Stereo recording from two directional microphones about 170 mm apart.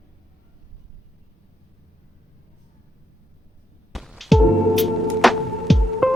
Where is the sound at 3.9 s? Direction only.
Centre (ahead or behind).